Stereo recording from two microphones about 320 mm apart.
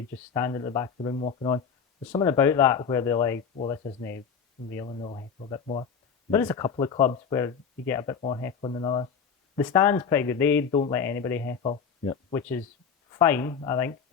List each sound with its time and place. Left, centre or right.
0.3 s speech: centre